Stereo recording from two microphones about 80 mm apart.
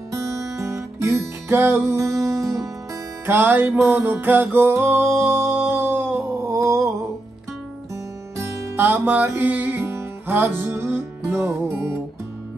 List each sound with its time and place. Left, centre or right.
0.1 s music: right
3.3 s music: right
6.5 s a sound: right
7.9 s music: right
8.8 s music: right